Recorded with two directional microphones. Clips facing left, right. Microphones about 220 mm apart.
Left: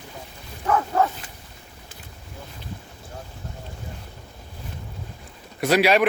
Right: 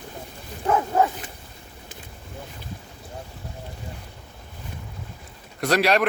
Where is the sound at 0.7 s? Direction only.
20° right (ahead or behind).